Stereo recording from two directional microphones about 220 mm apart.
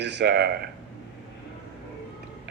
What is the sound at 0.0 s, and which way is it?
Speech, 50° right (ahead or behind).